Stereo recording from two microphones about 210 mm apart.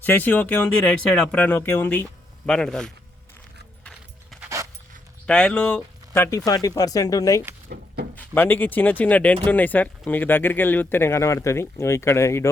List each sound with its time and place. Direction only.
0.0 s speech: 10° left (ahead or behind)
4.4 s dog: 15° right (ahead or behind)
5.2 s speech: 5° left (ahead or behind)